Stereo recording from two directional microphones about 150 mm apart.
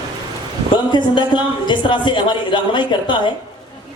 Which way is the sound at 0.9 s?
30° left (ahead or behind).